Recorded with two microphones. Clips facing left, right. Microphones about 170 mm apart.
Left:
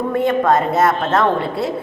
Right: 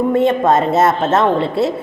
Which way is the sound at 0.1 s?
25° right (ahead or behind).